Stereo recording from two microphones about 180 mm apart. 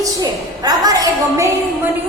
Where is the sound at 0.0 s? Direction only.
20° right (ahead or behind).